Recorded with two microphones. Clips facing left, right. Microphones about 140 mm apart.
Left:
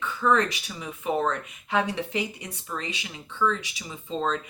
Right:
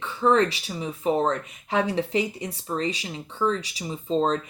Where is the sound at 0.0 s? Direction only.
30° right (ahead or behind).